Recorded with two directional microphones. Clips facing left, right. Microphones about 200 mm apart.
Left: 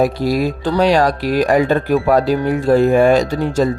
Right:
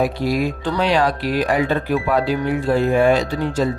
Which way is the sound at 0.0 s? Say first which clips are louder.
Left 4 dB; 40° left (ahead or behind).